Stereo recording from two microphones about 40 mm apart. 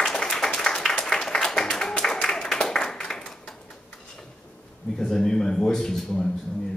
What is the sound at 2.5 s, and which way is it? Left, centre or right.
Clapping, centre.